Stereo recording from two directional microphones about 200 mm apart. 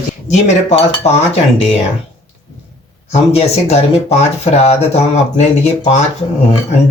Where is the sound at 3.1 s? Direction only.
30° left (ahead or behind).